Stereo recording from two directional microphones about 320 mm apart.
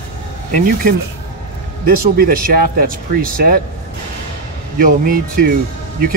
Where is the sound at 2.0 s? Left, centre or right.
Right.